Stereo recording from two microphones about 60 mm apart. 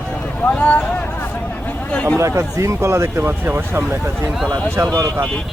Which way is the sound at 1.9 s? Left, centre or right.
Left.